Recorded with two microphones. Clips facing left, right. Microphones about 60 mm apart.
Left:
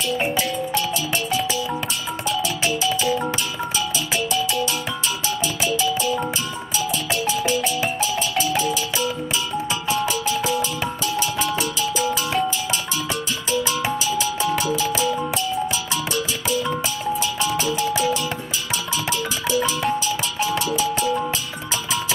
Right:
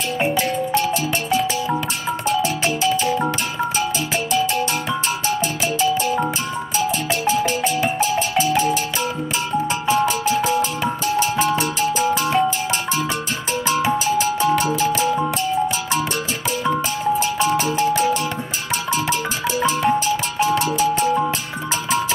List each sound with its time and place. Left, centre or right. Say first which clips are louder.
2.2 s music: right 3 dB; right
4.3 s music: right 5 dB; right
5.7 s music: right 3 dB; right
10.0 s music: right 4 dB; right
12.1 s music: right 4 dB; right
13.5 s music: right 3 dB; right
17.2 s music: right 4 dB; right
20.1 s music: right 4 dB; right